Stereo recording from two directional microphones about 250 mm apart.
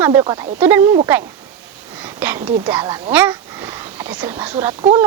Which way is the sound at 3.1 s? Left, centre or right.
Centre.